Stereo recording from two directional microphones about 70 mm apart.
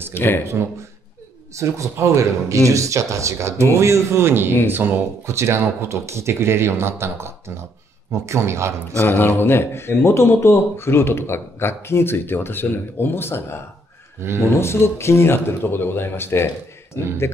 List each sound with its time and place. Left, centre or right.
0.1 s speech: left
1.6 s speech: right
9.0 s speech: left
14.6 s speech: left